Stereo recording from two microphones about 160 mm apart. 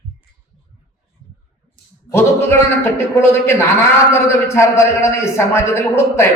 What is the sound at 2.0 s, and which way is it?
Speech, 15° left (ahead or behind).